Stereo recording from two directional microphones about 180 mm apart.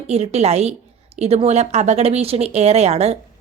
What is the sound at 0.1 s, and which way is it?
A woman's voice, 35° right (ahead or behind).